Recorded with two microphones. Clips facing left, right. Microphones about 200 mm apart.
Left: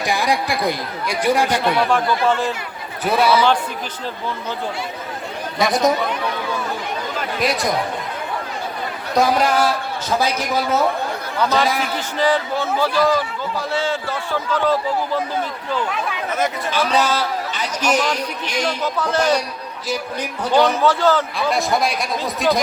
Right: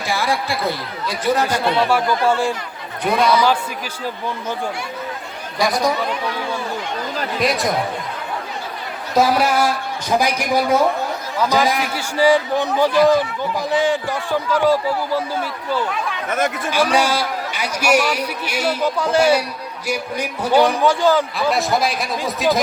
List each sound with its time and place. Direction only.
0.0 s speech: 15° left (ahead or behind)
1.9 s a man's voice: 10° right (ahead or behind)
3.0 s speech: 5° left (ahead or behind)
5.5 s speech: 20° left (ahead or behind)
7.3 s a man's voice: centre (ahead or behind)
9.1 s a man's voice: 5° right (ahead or behind)
16.7 s a man's voice: 10° right (ahead or behind)
21.3 s a man's voice: centre (ahead or behind)